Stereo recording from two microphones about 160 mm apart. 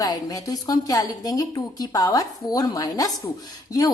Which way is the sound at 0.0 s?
25° left (ahead or behind).